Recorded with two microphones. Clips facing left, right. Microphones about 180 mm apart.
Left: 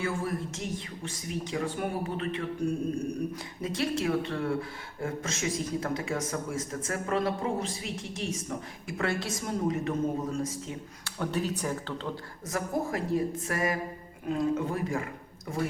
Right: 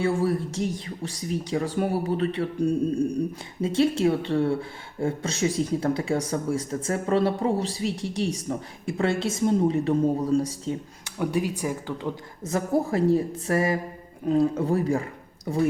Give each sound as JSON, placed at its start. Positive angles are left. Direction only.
{"t": 0.0, "sound": "speech", "side_deg": -30}
{"t": 3.6, "sound": "a woman's voice", "side_deg": -30}
{"t": 11.0, "sound": "speech", "side_deg": -15}
{"t": 12.5, "sound": "a woman's voice", "side_deg": -30}